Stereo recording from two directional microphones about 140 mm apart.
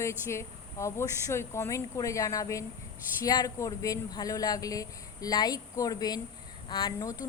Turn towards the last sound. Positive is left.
turn(degrees=25)  # may be behind; listen again after turning